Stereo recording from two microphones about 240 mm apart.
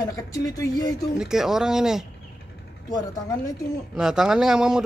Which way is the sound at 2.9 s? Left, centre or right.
Centre.